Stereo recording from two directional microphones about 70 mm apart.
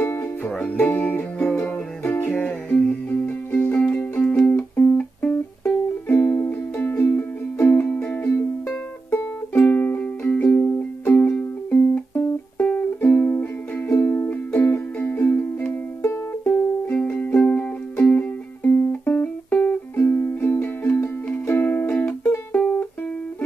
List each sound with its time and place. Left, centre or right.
0.0 s music: left
0.4 s music: left
9.7 s music: left
21.9 s music: centre